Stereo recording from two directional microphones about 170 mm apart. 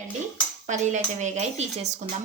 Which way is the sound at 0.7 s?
45° right (ahead or behind).